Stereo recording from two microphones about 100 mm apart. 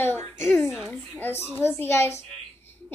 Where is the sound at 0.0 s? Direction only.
20° left (ahead or behind).